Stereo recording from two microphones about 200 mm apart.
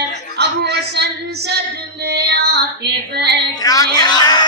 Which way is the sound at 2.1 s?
55° right (ahead or behind).